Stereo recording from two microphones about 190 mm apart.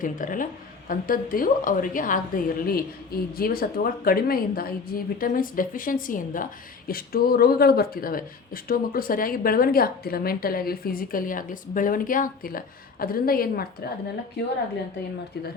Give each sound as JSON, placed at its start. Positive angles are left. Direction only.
{"t": 0.0, "sound": "a woman's voice", "side_deg": 45}